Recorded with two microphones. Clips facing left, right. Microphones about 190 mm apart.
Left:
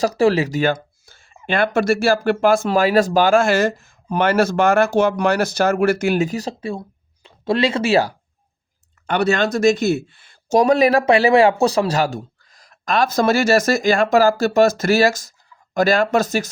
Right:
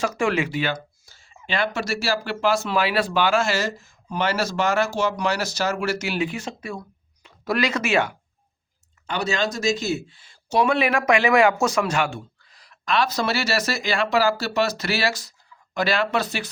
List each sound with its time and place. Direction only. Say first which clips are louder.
0.0 s speech: left 7 dB; 35° left (ahead or behind)
9.0 s speech: left 7 dB; 60° left (ahead or behind)
10.6 s speech: left 6 dB; 40° left (ahead or behind)